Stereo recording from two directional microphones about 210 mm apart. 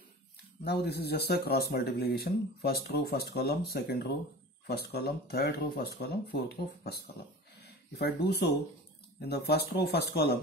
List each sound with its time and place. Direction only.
0.7 s speech: 50° left (ahead or behind)